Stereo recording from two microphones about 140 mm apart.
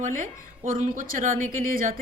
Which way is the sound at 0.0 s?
70° right (ahead or behind).